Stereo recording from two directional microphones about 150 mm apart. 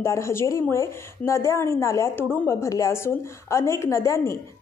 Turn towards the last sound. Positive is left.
turn(degrees=20)  # may be behind; listen again after turning